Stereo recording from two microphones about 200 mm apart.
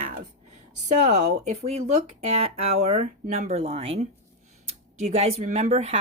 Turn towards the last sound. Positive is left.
turn(degrees=-35)  # may be behind; listen again after turning